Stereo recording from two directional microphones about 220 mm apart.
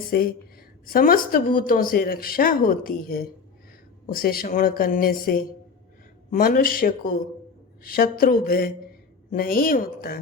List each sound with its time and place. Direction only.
0.1 s speech: 40° left (ahead or behind)